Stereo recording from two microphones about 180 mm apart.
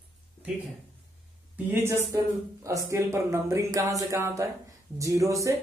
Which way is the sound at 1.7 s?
15° right (ahead or behind).